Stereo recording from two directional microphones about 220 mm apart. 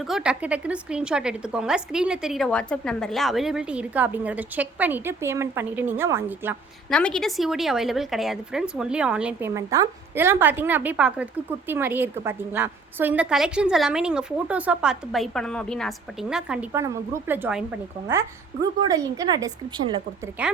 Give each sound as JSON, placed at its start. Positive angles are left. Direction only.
{"t": 0.0, "sound": "a woman's voice", "side_deg": -5}
{"t": 6.9, "sound": "a woman's voice", "side_deg": 5}
{"t": 18.9, "sound": "a woman's voice", "side_deg": -15}
{"t": 20.4, "sound": "a woman's voice", "side_deg": -5}